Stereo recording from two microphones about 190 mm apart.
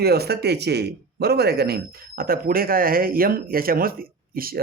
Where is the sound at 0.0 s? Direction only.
55° right (ahead or behind).